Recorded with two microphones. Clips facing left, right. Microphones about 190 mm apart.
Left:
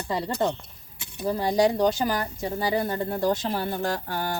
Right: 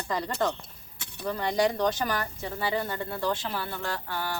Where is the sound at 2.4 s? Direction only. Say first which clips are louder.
Left 4 dB; 40° left (ahead or behind).